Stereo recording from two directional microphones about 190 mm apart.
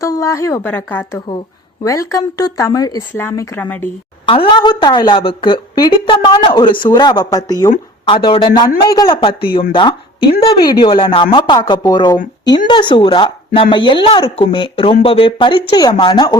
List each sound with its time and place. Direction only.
0.0 s a woman's voice: 15° left (ahead or behind)
4.3 s speech: 25° left (ahead or behind)